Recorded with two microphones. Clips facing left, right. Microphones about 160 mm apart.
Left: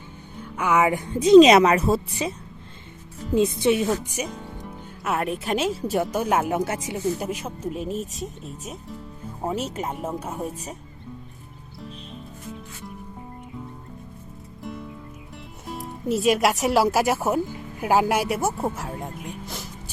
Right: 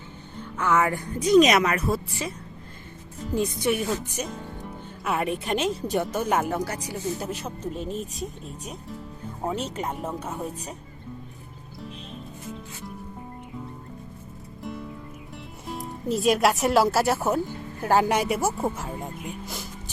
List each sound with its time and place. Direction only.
0.3 s a woman's voice: 10° left (ahead or behind)
3.3 s a woman's voice: 25° left (ahead or behind)
3.9 s speech: 5° left (ahead or behind)
6.5 s a woman's voice: 25° left (ahead or behind)
7.2 s speech: 10° left (ahead or behind)
14.6 s music: centre (ahead or behind)
16.6 s speech: 10° left (ahead or behind)